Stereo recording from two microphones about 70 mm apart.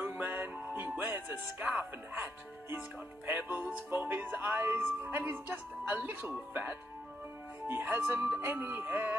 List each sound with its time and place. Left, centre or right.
0.0 s music: right
3.3 s speech: right